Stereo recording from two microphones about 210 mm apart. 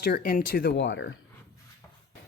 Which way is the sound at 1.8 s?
10° left (ahead or behind).